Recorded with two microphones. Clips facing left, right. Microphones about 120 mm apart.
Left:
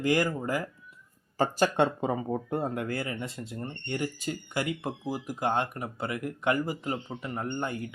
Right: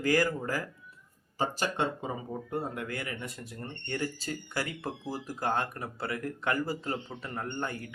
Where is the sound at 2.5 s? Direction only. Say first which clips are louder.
Left 1 dB; 35° left (ahead or behind).